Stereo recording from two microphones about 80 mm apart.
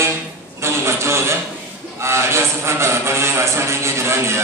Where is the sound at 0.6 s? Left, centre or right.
Right.